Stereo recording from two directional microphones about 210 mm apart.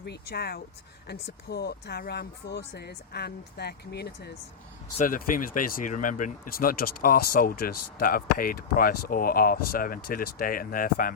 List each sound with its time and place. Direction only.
0.0 s speech: 50° left (ahead or behind)